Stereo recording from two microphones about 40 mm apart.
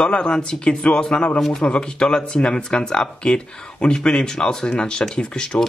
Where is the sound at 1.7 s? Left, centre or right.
Left.